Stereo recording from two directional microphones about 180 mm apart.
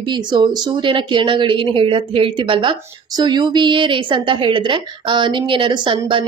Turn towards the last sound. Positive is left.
turn(degrees=-25)  # may be behind; listen again after turning